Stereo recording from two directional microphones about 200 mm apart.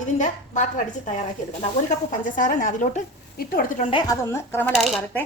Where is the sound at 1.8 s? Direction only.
40° left (ahead or behind).